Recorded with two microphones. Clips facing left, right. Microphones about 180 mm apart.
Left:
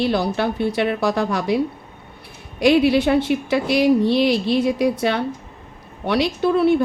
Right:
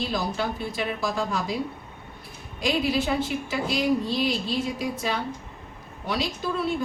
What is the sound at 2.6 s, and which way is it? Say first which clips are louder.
A woman's voice: left 10 dB; 70° left (ahead or behind).